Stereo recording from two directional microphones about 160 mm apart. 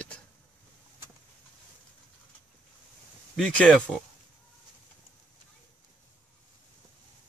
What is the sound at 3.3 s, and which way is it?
Speech, 5° left (ahead or behind).